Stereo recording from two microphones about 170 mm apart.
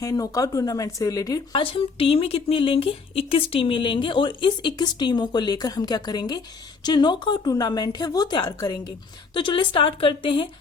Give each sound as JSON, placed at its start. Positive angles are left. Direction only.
{"t": 0.0, "sound": "speech", "side_deg": 20}
{"t": 1.6, "sound": "speech", "side_deg": 30}